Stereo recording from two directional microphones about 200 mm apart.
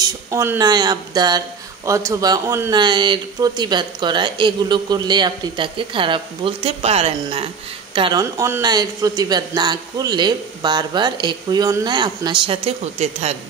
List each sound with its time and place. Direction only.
0.0 s speech: 15° right (ahead or behind); by 13.4 s 30° right (ahead or behind)